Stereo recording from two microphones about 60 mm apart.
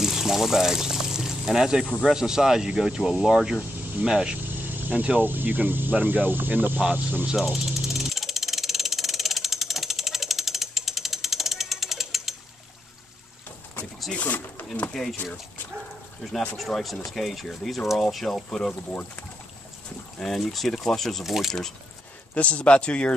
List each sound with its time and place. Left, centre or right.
0.0 s pour: centre
2.0 s speech: centre
4.4 s speech: right
6.8 s speech: centre
7.3 s vehicle: centre
14.1 s speech: left
14.9 s speech: centre
16.5 s speech: centre
18.7 s speech: centre
20.2 s speech: centre
22.3 s speech: left